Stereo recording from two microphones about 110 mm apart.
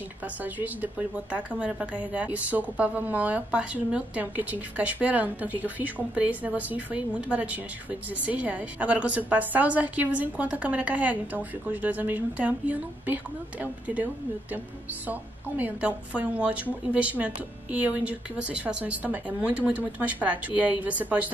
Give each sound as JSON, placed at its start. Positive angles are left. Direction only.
{"t": 0.2, "sound": "a woman's voice", "side_deg": -15}
{"t": 15.0, "sound": "a woman's voice", "side_deg": -15}